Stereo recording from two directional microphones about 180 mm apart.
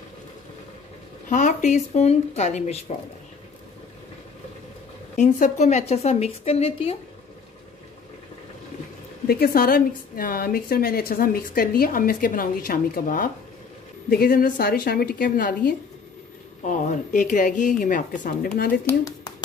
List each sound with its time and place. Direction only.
1.3 s a woman's voice: 40° left (ahead or behind)
5.1 s a woman's voice: 40° left (ahead or behind)
9.3 s a woman's voice: 55° left (ahead or behind)